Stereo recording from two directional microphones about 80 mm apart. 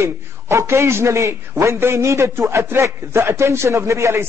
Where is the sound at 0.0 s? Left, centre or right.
Right.